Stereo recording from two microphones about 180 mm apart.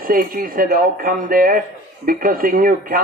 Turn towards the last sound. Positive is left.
turn(degrees=-50)  # may be behind; listen again after turning